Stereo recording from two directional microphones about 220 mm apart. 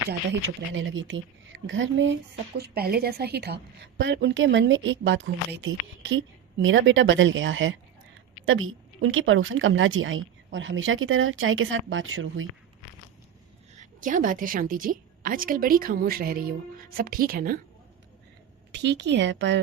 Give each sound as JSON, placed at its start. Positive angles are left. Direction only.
{"t": 0.7, "sound": "a woman's voice", "side_deg": -60}
{"t": 2.6, "sound": "a woman's voice", "side_deg": -45}
{"t": 13.7, "sound": "a woman's voice", "side_deg": -35}
{"t": 18.7, "sound": "a woman's voice", "side_deg": -50}